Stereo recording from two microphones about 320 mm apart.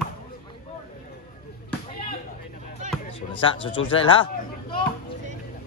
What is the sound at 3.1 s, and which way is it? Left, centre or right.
Speech, centre.